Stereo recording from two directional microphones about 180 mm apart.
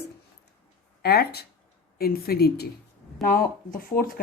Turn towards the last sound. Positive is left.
turn(degrees=55)  # may be behind; listen again after turning